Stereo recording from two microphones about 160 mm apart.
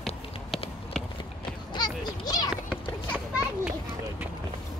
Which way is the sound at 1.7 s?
25° left (ahead or behind).